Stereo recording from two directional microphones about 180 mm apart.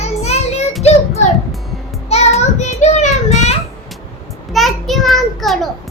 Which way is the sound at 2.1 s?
35° left (ahead or behind).